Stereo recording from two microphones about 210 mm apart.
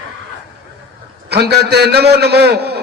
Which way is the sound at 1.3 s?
50° right (ahead or behind).